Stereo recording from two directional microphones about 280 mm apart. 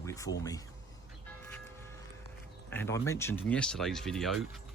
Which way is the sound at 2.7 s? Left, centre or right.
Centre.